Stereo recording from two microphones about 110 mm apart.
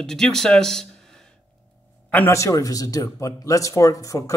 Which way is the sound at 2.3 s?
30° left (ahead or behind).